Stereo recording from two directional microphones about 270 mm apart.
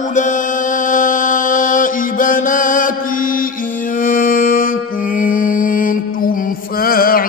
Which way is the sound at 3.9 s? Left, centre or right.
Left.